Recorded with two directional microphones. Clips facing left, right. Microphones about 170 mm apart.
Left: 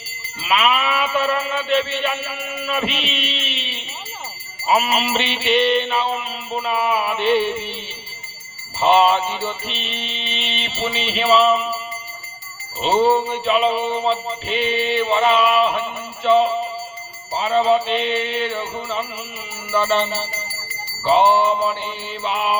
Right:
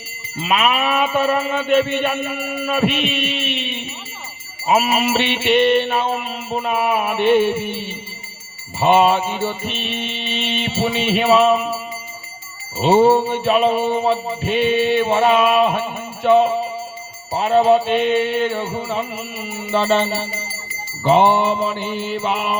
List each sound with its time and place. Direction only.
0.3 s mantra: 50° right (ahead or behind)
4.9 s mantra: 50° right (ahead or behind)
12.8 s mantra: 50° right (ahead or behind)
19.7 s mantra: 35° right (ahead or behind)
21.8 s mantra: 50° right (ahead or behind)